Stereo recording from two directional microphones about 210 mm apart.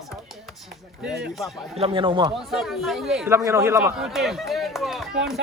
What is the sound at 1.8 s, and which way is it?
Speech, 25° right (ahead or behind).